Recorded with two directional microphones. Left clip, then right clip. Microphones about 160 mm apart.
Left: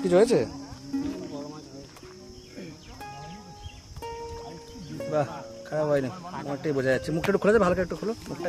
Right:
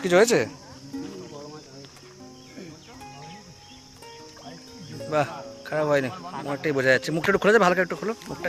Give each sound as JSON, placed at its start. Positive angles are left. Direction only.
{"t": 0.0, "sound": "speech", "side_deg": -5}
{"t": 0.9, "sound": "cricket", "side_deg": 0}
{"t": 5.1, "sound": "speech", "side_deg": -10}
{"t": 6.1, "sound": "speech", "side_deg": -50}
{"t": 6.5, "sound": "speech", "side_deg": -10}